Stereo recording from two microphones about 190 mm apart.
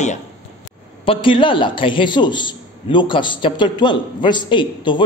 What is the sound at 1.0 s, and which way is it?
A man's voice, 25° left (ahead or behind).